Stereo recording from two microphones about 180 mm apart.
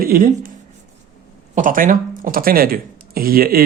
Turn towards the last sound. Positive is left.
turn(degrees=-55)  # may be behind; listen again after turning